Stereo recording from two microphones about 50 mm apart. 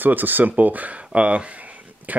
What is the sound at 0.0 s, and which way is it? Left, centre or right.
Speech, right.